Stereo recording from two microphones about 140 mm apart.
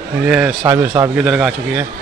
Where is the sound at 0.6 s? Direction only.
15° right (ahead or behind).